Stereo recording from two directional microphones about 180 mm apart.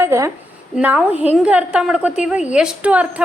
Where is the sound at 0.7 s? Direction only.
5° right (ahead or behind).